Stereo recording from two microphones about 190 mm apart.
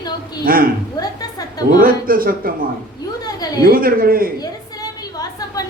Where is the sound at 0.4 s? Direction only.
50° right (ahead or behind).